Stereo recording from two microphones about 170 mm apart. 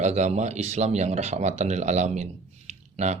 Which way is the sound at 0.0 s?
40° right (ahead or behind).